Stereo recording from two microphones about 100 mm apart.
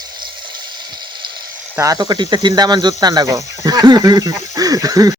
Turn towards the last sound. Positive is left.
turn(degrees=-35)  # may be behind; listen again after turning